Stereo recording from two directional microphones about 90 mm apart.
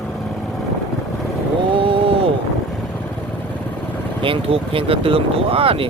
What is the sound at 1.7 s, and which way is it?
Vehicle, 80° right.